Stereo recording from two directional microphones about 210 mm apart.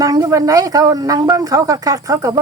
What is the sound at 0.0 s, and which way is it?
Speech, 15° right (ahead or behind).